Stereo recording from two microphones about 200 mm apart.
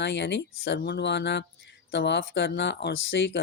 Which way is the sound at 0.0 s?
60° left (ahead or behind).